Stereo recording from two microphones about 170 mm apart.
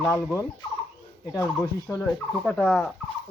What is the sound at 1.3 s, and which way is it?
Speech, 20° left (ahead or behind).